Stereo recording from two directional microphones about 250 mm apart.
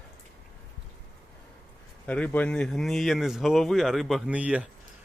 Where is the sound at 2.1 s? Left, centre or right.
Centre.